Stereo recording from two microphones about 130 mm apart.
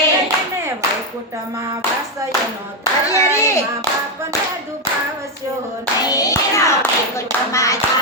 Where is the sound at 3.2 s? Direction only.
20° left (ahead or behind).